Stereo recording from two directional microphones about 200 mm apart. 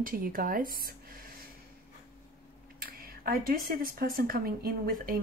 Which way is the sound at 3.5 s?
45° right (ahead or behind).